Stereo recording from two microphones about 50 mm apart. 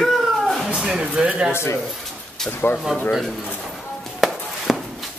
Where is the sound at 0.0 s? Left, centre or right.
Centre.